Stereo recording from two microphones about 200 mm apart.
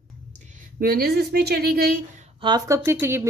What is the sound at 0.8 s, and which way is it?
A woman's voice, 50° right (ahead or behind).